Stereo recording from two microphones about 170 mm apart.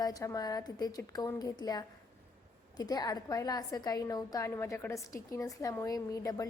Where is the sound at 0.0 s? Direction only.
20° left (ahead or behind).